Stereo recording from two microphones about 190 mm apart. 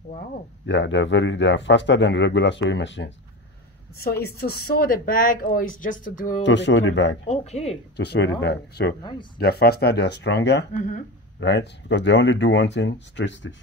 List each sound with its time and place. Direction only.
0.7 s speech: 70° left (ahead or behind)
4.0 s speech: 55° left (ahead or behind)
6.4 s speech: 75° left (ahead or behind)
7.2 s speech: 35° left (ahead or behind)
7.9 s speech: 60° left (ahead or behind)
10.7 s speech: 40° left (ahead or behind)
11.3 s speech: 70° left (ahead or behind)